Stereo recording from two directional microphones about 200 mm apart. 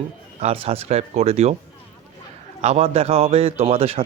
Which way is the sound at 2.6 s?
30° right (ahead or behind).